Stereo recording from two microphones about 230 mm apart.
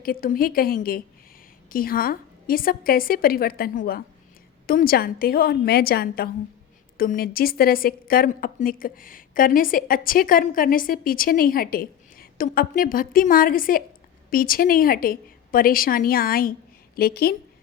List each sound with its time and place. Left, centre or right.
0.0 s a woman's voice: left